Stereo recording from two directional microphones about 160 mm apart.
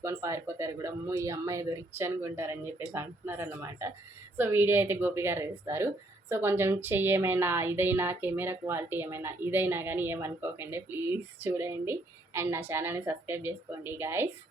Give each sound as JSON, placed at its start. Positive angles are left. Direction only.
{"t": 0.0, "sound": "a woman's voice", "side_deg": -15}